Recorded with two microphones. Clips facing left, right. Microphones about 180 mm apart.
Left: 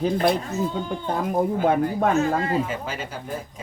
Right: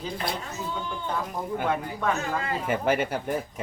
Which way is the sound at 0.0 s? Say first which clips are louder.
Left 11 dB; 55° left (ahead or behind).